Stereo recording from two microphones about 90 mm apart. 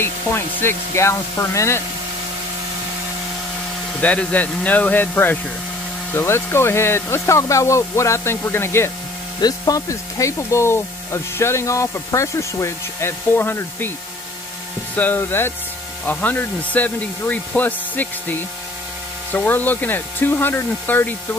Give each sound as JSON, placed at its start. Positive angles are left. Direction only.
{"t": 0.0, "sound": "speech", "side_deg": 25}
{"t": 4.0, "sound": "speech", "side_deg": 15}
{"t": 9.4, "sound": "speech", "side_deg": 45}
{"t": 15.0, "sound": "speech", "side_deg": 20}